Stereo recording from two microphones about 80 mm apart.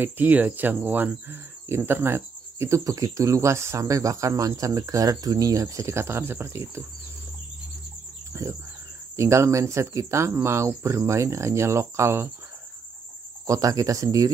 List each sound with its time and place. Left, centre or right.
0.0 s speech: right
8.3 s cricket: right
9.1 s speech: right
13.5 s speech: right